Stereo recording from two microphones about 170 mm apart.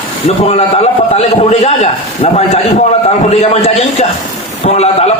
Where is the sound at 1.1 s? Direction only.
40° left (ahead or behind).